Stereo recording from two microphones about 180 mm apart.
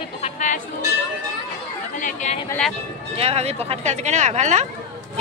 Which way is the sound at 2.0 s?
45° left (ahead or behind).